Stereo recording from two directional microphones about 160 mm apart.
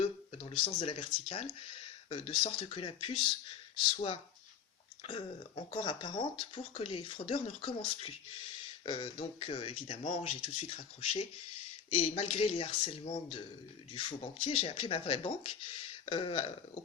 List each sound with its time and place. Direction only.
0.0 s speech: 35° left (ahead or behind)